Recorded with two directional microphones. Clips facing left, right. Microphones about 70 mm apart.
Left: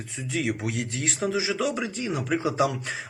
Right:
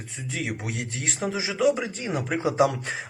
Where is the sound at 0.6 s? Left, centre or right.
Centre.